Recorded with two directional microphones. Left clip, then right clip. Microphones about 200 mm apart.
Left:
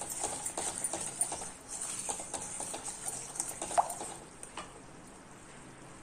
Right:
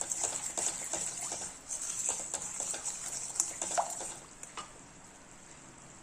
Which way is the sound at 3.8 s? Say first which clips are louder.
Left 4 dB; 10° right (ahead or behind).